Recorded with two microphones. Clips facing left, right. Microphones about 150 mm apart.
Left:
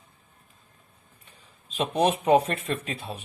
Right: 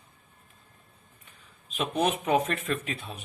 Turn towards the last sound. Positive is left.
turn(degrees=35)  # may be behind; listen again after turning